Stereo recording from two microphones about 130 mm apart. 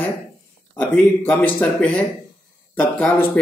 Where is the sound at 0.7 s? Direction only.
15° left (ahead or behind).